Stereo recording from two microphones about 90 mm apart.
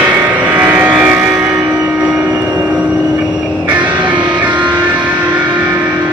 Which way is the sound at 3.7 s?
15° right (ahead or behind).